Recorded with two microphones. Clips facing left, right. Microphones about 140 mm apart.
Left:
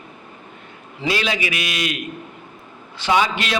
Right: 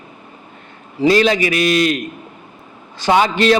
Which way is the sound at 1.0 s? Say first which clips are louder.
Right 10 dB; 40° right (ahead or behind).